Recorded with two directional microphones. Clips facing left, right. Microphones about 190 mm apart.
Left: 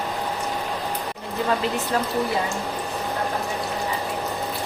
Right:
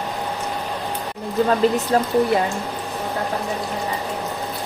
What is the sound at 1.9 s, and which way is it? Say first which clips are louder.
Speech: right 5 dB; 40° right (ahead or behind).